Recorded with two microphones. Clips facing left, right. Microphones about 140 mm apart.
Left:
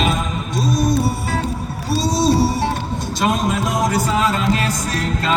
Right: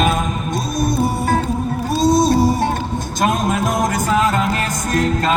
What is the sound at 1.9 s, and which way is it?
Music, 50° right (ahead or behind).